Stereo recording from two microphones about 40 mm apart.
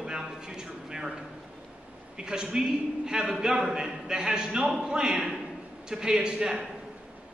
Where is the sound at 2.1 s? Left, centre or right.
Right.